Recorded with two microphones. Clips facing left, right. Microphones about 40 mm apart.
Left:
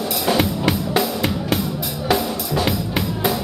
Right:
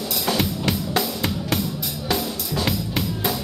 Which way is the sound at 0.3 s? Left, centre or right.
Centre.